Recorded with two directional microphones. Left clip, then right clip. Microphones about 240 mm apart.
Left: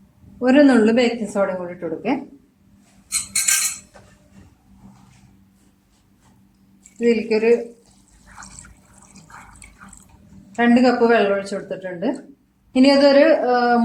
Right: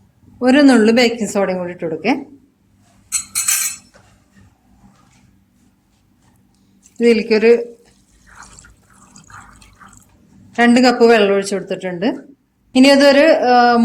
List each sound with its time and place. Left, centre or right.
0.3 s a woman's voice: right
7.0 s speech: right
8.4 s water: centre
10.5 s a woman's voice: right